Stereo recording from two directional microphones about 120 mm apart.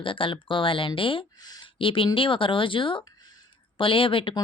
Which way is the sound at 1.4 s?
35° left (ahead or behind).